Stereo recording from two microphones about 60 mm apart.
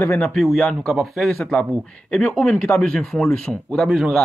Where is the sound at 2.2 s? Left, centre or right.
Left.